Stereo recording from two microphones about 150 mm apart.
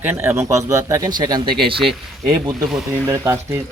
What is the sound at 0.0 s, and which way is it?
A man's voice, 15° right (ahead or behind).